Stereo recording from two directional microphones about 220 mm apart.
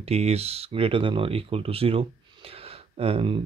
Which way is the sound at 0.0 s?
30° right (ahead or behind).